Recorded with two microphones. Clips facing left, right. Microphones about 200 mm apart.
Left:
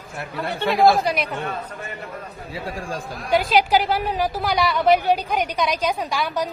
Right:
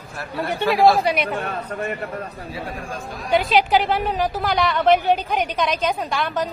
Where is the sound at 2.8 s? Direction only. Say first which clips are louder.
Left 2 dB; 30° left (ahead or behind).